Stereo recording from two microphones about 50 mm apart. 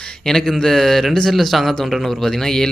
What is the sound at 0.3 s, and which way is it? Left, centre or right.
A man's voice, centre.